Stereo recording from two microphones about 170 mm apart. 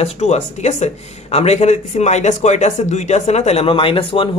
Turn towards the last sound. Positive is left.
turn(degrees=30)  # may be behind; listen again after turning